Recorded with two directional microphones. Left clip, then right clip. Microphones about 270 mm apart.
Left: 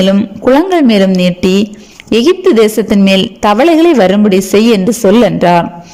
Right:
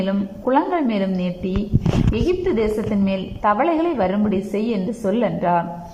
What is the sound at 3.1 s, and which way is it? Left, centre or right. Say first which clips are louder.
A man's voice: left 9 dB; left.